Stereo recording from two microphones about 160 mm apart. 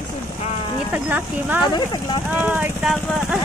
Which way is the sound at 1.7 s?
25° left (ahead or behind).